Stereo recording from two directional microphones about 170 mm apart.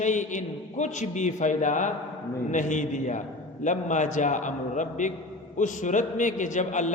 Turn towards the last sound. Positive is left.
turn(degrees=45)  # may be behind; listen again after turning